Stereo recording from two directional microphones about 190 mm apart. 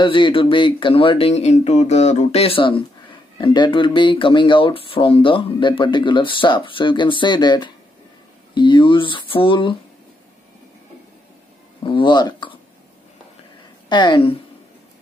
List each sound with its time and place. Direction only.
0.0 s speech: 25° left (ahead or behind)
11.8 s speech: 25° left (ahead or behind)
13.8 s a woman's voice: 25° left (ahead or behind)